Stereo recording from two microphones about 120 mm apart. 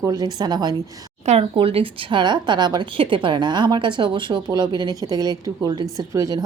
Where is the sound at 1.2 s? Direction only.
55° right (ahead or behind).